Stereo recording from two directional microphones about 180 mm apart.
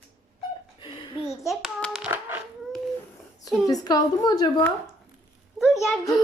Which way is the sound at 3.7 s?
20° left (ahead or behind).